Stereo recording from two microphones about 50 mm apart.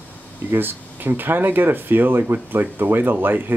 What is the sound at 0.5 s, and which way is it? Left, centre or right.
Speech, right.